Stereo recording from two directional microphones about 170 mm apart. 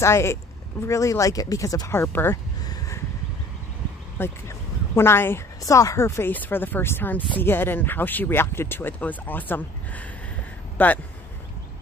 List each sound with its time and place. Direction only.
0.0 s speech: 15° left (ahead or behind)
4.2 s speech: 15° left (ahead or behind)